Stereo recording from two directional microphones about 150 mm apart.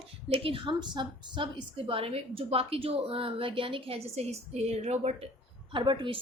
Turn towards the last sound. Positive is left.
turn(degrees=-35)  # may be behind; listen again after turning